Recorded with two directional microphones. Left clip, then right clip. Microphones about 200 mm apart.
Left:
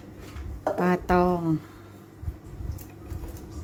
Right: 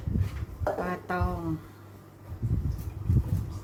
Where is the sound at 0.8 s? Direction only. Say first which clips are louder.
Left 9 dB; 50° left (ahead or behind).